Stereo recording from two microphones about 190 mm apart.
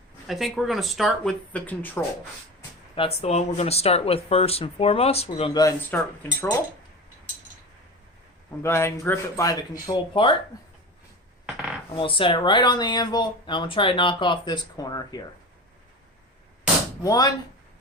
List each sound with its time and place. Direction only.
0.3 s speech: centre (ahead or behind)
2.9 s speech: 30° left (ahead or behind)
5.5 s a man's voice: 15° left (ahead or behind)
8.6 s a man's voice: 15° left (ahead or behind)
11.4 s coin: 5° right (ahead or behind)
11.9 s speech: 30° left (ahead or behind)
17.0 s speech: 20° left (ahead or behind)